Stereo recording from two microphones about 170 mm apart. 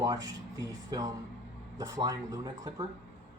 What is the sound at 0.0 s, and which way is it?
Speech, 20° right (ahead or behind).